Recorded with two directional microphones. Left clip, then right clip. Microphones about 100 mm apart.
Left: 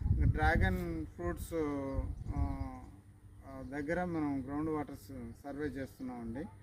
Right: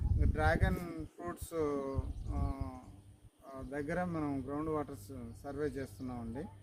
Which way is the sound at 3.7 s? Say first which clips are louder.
Left 1 dB; 30° right (ahead or behind).